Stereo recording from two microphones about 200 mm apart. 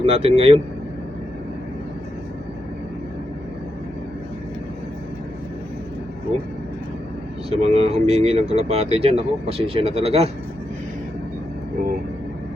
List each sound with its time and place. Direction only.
0.0 s speech: 30° right (ahead or behind)
7.5 s speech: 30° right (ahead or behind)